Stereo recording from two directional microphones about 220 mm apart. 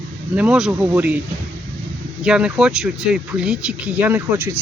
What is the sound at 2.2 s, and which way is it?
Speech, 5° right (ahead or behind).